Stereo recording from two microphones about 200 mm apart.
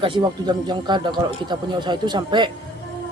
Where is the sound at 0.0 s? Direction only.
25° right (ahead or behind).